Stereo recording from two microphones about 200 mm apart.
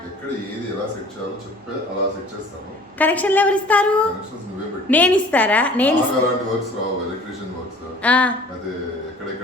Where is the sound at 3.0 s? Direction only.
10° left (ahead or behind).